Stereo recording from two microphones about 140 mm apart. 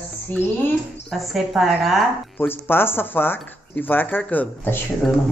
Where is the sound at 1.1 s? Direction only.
Centre (ahead or behind).